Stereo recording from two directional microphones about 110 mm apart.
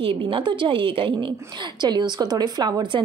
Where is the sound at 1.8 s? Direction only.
40° right (ahead or behind).